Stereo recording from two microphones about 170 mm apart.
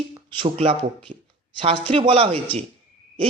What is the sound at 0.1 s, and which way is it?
Speech, 30° right (ahead or behind).